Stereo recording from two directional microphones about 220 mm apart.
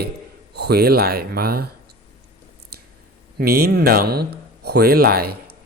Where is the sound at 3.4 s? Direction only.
45° right (ahead or behind).